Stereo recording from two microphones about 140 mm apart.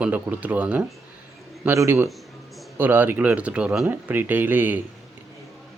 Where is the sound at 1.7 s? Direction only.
20° right (ahead or behind).